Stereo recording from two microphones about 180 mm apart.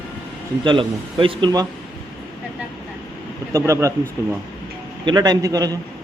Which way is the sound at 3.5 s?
15° right (ahead or behind).